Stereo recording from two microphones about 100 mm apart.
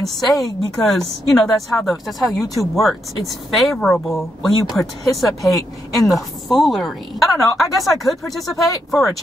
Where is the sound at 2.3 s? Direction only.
35° left (ahead or behind).